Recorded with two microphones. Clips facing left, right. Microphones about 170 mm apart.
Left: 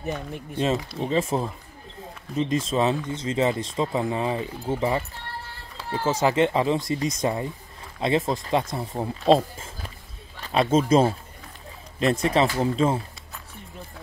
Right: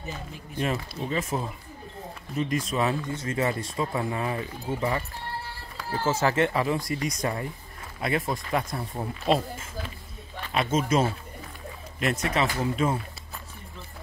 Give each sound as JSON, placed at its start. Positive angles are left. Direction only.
{"t": 0.0, "sound": "speech", "side_deg": 60}
{"t": 0.6, "sound": "speech", "side_deg": 20}
{"t": 6.0, "sound": "speech", "side_deg": 15}
{"t": 9.2, "sound": "speech", "side_deg": 30}